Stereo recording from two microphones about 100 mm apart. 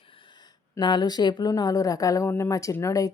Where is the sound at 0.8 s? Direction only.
45° left (ahead or behind).